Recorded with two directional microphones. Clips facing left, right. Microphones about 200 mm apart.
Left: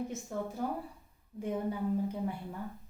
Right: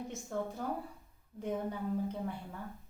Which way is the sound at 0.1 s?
5° left (ahead or behind).